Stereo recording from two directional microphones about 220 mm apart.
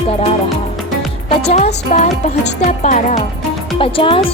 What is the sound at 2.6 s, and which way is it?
Speech, 35° left (ahead or behind).